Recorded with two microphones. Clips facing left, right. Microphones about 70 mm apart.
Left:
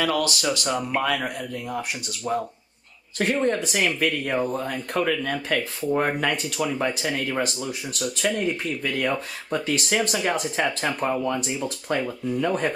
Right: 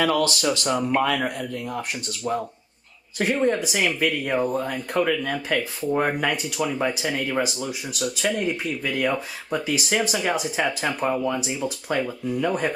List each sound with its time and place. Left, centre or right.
0.0 s speech: right
0.4 s speech: centre
3.2 s speech: centre